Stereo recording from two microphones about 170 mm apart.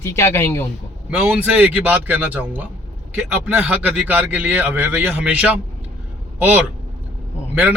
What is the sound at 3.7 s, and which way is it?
A man's voice, 10° right (ahead or behind).